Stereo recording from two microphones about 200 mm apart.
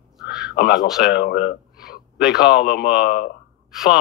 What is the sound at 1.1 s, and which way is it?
Speech, 55° left (ahead or behind).